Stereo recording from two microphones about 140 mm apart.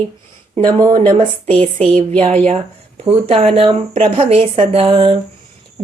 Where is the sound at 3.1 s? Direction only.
45° right (ahead or behind).